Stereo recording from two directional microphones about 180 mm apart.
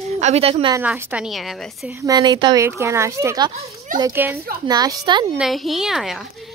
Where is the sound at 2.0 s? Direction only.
20° right (ahead or behind).